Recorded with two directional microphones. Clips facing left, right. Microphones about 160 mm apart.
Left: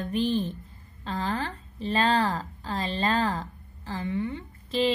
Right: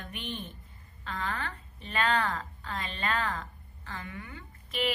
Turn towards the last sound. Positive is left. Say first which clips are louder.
# left 7 dB
turn(degrees=30)  # may be behind; listen again after turning